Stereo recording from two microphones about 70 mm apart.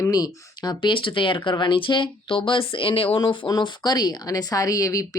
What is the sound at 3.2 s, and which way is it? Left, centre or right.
Speech, left.